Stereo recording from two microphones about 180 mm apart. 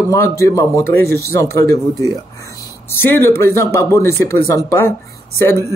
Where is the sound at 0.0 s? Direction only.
15° left (ahead or behind).